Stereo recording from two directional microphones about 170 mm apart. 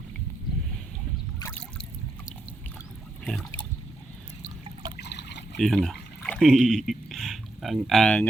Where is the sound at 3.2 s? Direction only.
5° left (ahead or behind).